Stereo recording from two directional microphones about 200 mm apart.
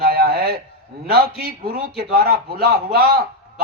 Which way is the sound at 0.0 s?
50° right (ahead or behind).